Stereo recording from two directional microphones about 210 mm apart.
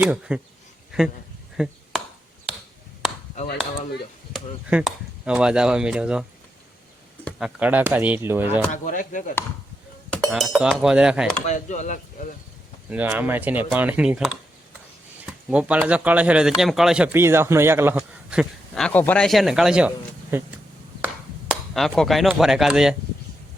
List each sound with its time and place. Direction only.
0.0 s speech: 5° right (ahead or behind)
1.5 s chop: 5° right (ahead or behind)
4.3 s speech: centre (ahead or behind)
7.3 s speech: centre (ahead or behind)
8.7 s speech: 35° left (ahead or behind)
10.1 s cutlery: centre (ahead or behind)
10.5 s speech: centre (ahead or behind)
11.4 s speech: 35° left (ahead or behind)
12.9 s speech: 5° right (ahead or behind)
18.3 s speech: centre (ahead or behind)